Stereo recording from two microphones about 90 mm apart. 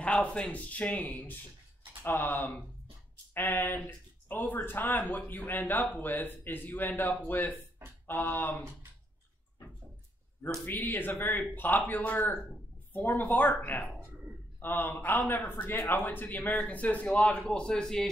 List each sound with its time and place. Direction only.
0.0 s speech: 15° left (ahead or behind)
10.6 s speech: 20° left (ahead or behind)